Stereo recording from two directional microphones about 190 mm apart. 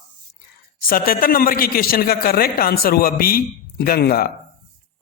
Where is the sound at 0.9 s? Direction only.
50° left (ahead or behind).